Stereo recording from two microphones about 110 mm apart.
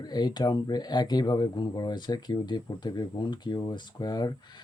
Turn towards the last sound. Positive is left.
turn(degrees=40)  # may be behind; listen again after turning